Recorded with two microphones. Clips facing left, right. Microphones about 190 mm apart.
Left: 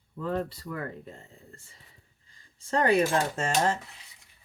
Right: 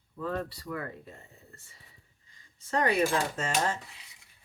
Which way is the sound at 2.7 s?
30° left (ahead or behind).